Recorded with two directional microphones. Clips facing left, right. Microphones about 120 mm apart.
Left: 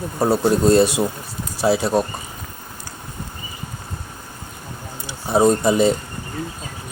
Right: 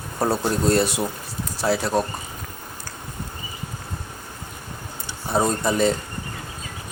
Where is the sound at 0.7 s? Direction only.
15° left (ahead or behind).